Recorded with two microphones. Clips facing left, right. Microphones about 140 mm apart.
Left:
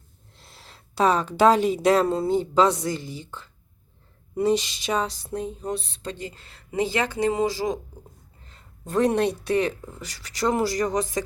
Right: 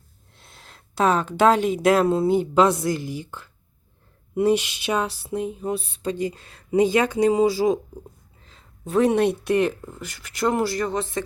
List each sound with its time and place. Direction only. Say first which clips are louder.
0.3 s speech: even; centre (ahead or behind)
4.4 s a sound: right 2 dB; 5° right (ahead or behind)
8.8 s speech: right 3 dB; 5° right (ahead or behind)
10.1 s speech: right 1 dB; 35° left (ahead or behind)